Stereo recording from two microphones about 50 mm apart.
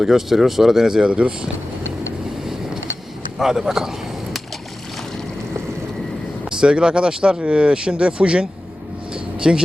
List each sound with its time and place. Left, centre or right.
0.0 s speech: centre
3.3 s a sound: centre
6.4 s speech: centre
9.1 s vehicle: centre